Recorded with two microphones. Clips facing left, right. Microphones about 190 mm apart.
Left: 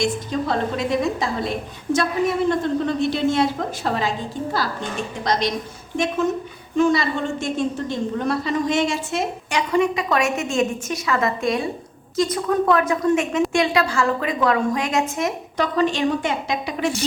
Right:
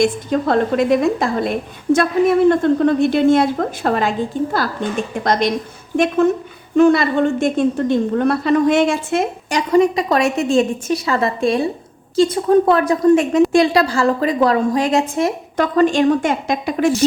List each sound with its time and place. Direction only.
0.0 s a woman's voice: 55° right (ahead or behind)
2.5 s a woman's voice: 55° right (ahead or behind)
9.5 s a woman's voice: 40° right (ahead or behind)
15.5 s a woman's voice: 50° right (ahead or behind)